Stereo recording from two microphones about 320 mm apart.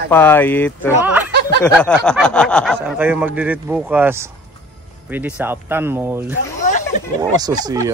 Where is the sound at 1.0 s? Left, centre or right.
Centre.